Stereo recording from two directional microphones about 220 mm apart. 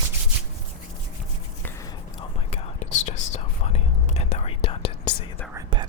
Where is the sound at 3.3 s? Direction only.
30° left (ahead or behind).